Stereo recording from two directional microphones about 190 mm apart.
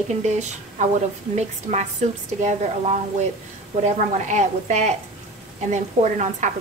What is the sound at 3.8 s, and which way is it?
A woman's voice, 40° right (ahead or behind).